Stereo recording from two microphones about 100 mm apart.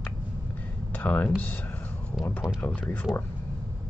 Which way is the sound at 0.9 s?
15° left (ahead or behind).